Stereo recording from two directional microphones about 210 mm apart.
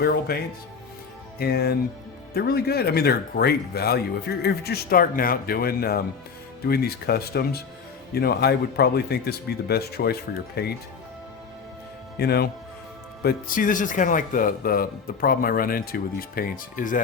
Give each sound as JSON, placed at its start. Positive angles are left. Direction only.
{"t": 0.0, "sound": "speech", "side_deg": 45}
{"t": 12.2, "sound": "speech", "side_deg": 50}